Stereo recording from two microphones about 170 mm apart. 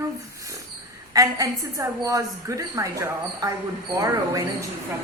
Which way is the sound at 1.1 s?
20° right (ahead or behind).